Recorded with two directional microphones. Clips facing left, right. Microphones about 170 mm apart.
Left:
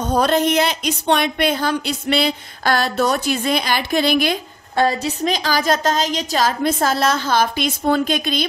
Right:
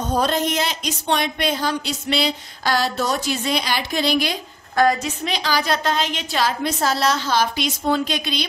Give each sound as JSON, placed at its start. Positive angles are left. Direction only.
{"t": 0.2, "sound": "a woman's voice", "side_deg": 65}
{"t": 4.7, "sound": "a woman's voice", "side_deg": 30}